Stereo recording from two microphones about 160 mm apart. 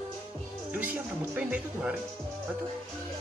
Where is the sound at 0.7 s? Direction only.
10° right (ahead or behind).